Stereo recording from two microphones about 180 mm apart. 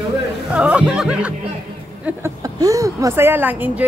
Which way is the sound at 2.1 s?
15° right (ahead or behind).